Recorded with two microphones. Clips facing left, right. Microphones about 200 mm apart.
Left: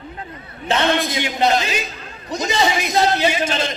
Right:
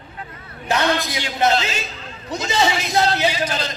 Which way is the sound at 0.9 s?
20° left (ahead or behind).